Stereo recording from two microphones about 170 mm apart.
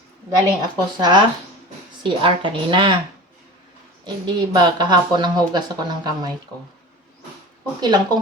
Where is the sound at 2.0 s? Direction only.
30° right (ahead or behind).